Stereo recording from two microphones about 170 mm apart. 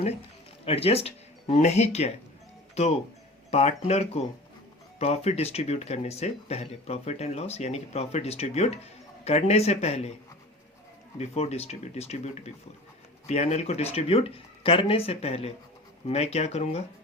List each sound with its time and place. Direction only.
0.6 s speech: 35° left (ahead or behind)
3.5 s speech: 40° left (ahead or behind)
11.2 s speech: 40° left (ahead or behind)